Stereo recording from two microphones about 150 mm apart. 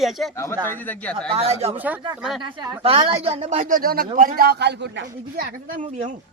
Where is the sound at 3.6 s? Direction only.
65° right (ahead or behind); by 4.9 s 90° right.